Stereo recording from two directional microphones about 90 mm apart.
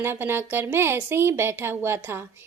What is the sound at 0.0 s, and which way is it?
A woman's voice, 25° right (ahead or behind).